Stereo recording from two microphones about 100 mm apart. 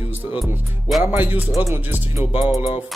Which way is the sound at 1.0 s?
20° right (ahead or behind).